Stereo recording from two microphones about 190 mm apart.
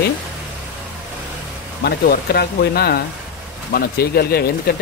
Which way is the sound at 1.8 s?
55° left (ahead or behind).